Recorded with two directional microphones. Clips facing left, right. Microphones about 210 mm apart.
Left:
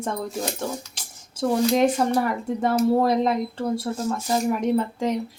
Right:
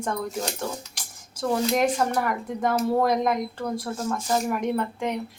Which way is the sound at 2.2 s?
30° left (ahead or behind).